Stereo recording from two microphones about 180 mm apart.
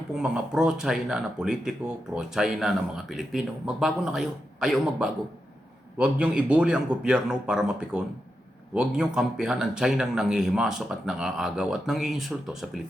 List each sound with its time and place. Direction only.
0.1 s speech: 5° right (ahead or behind)